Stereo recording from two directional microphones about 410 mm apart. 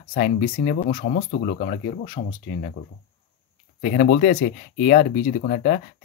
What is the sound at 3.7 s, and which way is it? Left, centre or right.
Speech, centre.